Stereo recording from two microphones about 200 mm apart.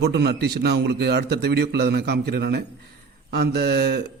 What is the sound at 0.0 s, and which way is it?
A man's voice, 55° right (ahead or behind).